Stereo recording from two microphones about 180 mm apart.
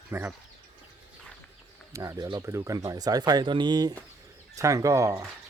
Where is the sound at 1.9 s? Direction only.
20° right (ahead or behind).